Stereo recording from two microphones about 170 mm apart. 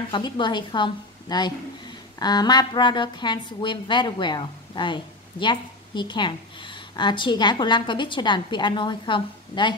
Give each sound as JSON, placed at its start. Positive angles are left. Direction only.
{"t": 0.1, "sound": "speech", "side_deg": 25}